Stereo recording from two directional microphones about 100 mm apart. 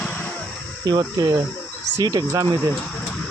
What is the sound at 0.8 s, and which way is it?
Speech, 45° right (ahead or behind).